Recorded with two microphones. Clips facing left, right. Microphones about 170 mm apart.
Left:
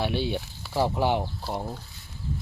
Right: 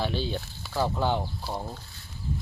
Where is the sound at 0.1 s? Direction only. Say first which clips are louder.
Left 3 dB; 65° left (ahead or behind).